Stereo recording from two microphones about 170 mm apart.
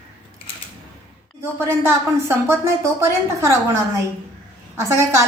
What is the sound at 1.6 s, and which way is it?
A woman's voice, 15° right (ahead or behind).